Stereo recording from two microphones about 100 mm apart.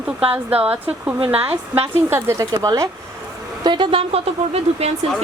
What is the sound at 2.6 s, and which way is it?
Speech, 35° right (ahead or behind).